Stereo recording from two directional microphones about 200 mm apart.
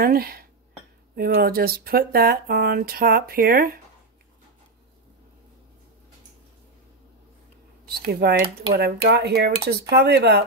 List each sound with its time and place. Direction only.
0.0 s speech: 50° right (ahead or behind)
8.1 s speech: 55° right (ahead or behind)